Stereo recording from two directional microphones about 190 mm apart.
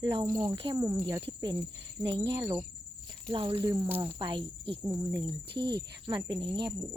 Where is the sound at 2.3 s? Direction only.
20° right (ahead or behind).